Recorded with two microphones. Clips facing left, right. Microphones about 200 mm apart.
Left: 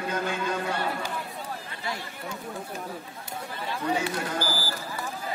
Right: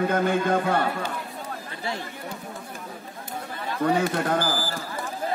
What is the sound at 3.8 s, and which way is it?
Speech, 55° right (ahead or behind).